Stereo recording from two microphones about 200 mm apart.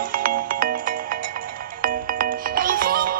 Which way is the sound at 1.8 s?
45° right (ahead or behind).